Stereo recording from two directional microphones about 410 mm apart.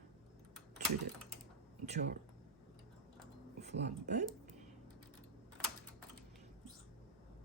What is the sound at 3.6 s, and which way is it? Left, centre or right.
Speech, right.